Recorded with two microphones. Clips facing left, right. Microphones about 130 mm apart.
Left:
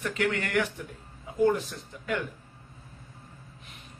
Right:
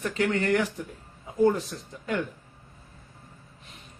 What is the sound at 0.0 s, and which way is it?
Speech, 35° right (ahead or behind).